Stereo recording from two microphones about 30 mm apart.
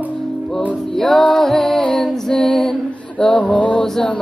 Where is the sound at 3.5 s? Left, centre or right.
Left.